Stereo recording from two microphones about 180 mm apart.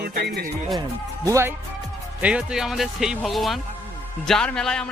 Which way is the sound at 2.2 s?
5° right (ahead or behind).